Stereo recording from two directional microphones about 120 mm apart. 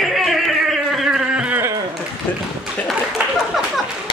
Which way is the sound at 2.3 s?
15° left (ahead or behind).